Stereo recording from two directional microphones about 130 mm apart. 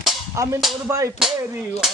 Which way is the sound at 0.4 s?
25° right (ahead or behind).